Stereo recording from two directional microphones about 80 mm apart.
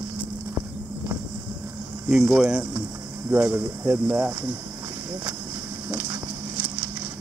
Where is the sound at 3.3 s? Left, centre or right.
Right.